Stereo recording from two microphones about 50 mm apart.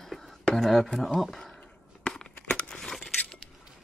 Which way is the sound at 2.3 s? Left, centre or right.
Left.